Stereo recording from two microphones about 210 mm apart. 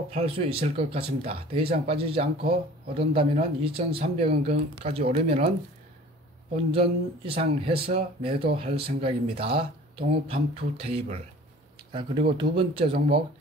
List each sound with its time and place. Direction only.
0.1 s speech: 25° right (ahead or behind)
6.5 s speech: 25° right (ahead or behind)